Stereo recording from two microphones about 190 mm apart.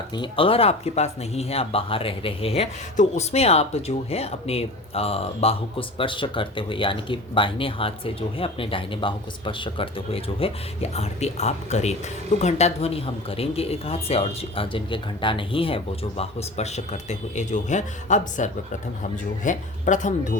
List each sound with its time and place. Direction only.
0.1 s speech: 25° left (ahead or behind); by 20.1 s 40° left (ahead or behind)